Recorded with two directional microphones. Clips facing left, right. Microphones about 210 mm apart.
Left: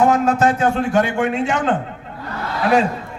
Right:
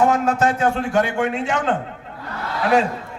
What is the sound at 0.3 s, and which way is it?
A man's voice, 20° left (ahead or behind).